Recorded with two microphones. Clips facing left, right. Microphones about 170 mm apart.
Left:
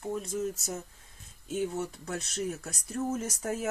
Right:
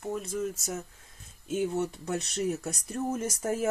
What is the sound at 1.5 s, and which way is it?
Speech, 10° right (ahead or behind).